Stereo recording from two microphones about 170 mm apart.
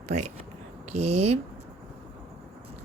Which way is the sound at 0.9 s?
40° right (ahead or behind).